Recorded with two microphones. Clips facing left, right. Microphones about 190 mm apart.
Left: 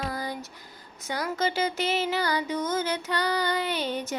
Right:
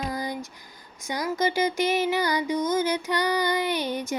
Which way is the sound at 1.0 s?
15° right (ahead or behind).